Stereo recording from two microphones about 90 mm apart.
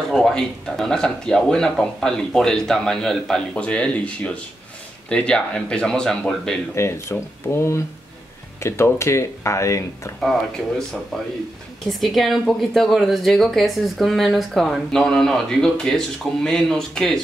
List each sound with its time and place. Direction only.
0.1 s speech: 5° left (ahead or behind)
6.7 s speech: 30° left (ahead or behind)
11.9 s speech: centre (ahead or behind)